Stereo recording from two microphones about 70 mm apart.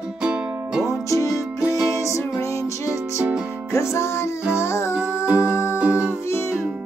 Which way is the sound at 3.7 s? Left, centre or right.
Left.